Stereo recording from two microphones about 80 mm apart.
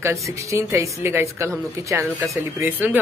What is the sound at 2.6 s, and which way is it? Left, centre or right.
Speech, right.